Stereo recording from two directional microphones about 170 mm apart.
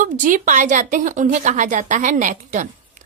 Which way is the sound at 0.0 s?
50° right (ahead or behind).